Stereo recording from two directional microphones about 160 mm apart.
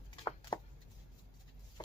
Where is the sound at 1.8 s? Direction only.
25° left (ahead or behind).